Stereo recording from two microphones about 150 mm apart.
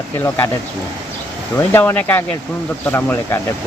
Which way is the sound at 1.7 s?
15° left (ahead or behind).